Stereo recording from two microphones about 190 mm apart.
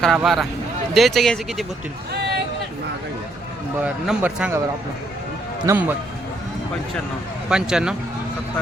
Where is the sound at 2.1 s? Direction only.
60° right (ahead or behind).